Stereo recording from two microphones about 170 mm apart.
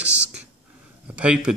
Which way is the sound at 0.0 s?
5° right (ahead or behind).